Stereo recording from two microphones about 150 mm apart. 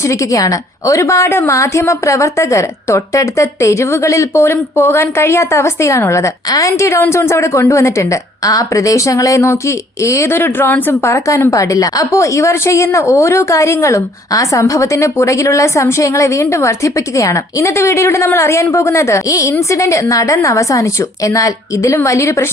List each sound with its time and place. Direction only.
0.0 s a woman's voice: 20° left (ahead or behind)